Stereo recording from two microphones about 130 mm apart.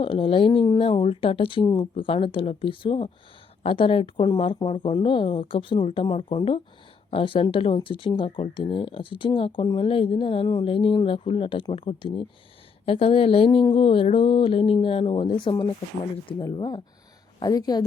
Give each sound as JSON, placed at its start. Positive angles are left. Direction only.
{"t": 0.0, "sound": "speech", "side_deg": 45}